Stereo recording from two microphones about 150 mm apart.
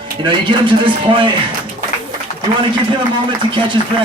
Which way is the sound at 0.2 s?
30° right (ahead or behind).